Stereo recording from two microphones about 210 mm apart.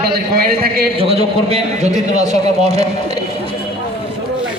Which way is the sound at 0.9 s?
30° right (ahead or behind).